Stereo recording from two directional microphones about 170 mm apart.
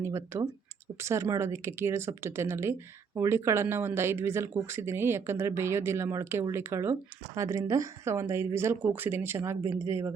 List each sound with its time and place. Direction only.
0.0 s speech: 15° right (ahead or behind)